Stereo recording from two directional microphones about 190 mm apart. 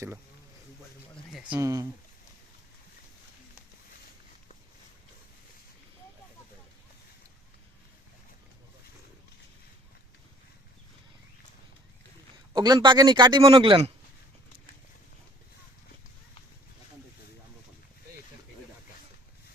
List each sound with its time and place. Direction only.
1.1 s a sound: centre (ahead or behind)
1.5 s speech: 15° right (ahead or behind)
12.5 s a man's voice: 20° right (ahead or behind)